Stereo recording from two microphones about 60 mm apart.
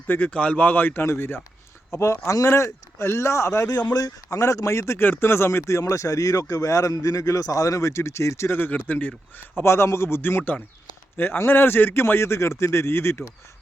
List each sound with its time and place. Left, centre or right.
0.1 s a man's voice: left
3.9 s speech: left
4.9 s speech: left
8.4 s a man's voice: left
9.6 s a man's voice: left